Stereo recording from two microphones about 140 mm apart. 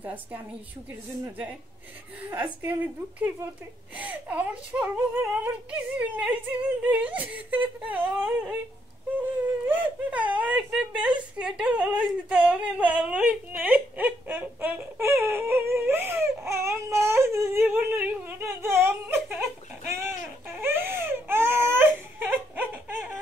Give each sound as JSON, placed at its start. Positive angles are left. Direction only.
{"t": 0.0, "sound": "speech", "side_deg": -10}
{"t": 2.2, "sound": "speech", "side_deg": -10}
{"t": 20.4, "sound": "baby cry", "side_deg": -15}